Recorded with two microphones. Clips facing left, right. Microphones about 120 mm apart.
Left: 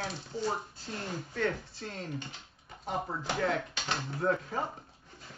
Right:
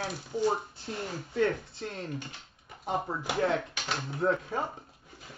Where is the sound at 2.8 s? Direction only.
20° right (ahead or behind).